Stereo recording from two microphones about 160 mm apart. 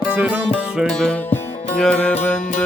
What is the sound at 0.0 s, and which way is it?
Music, 10° right (ahead or behind).